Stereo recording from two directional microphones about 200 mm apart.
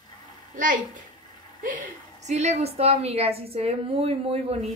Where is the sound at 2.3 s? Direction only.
35° right (ahead or behind).